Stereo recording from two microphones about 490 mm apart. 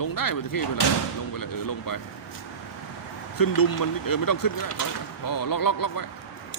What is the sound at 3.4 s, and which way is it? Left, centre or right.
Speech, left.